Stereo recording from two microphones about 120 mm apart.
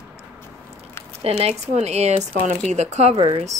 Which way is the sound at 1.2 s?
60° right (ahead or behind).